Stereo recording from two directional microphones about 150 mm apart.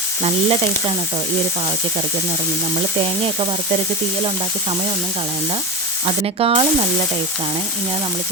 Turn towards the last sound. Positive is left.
turn(degrees=-40)  # may be behind; listen again after turning